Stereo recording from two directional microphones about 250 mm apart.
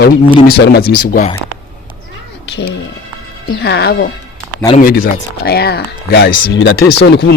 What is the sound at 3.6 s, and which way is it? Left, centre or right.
Speech, left.